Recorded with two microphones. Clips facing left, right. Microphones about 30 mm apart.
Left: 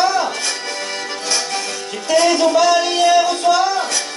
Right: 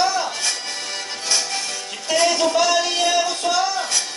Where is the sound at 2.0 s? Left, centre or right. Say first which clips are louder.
Left 4 dB; centre.